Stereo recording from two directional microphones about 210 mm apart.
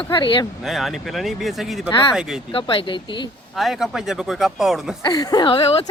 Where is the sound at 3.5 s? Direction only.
Centre (ahead or behind).